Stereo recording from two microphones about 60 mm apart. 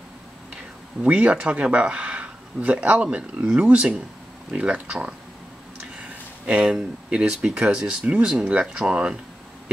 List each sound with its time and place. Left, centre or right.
1.0 s speech: right
6.4 s speech: centre